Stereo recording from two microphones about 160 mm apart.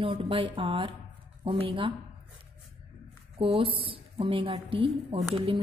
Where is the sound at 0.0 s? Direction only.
35° right (ahead or behind).